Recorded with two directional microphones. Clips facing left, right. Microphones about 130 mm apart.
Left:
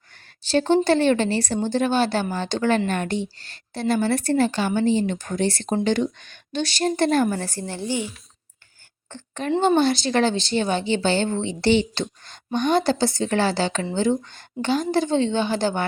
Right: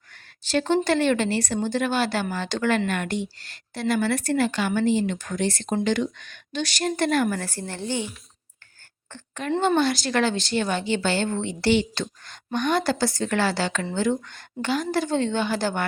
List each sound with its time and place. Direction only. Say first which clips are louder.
0.1 s a woman's voice: left 3 dB; 30° left (ahead or behind)
7.4 s a woman's voice: left 2 dB; 15° left (ahead or behind)
9.0 s speech: left 3 dB; 25° left (ahead or behind)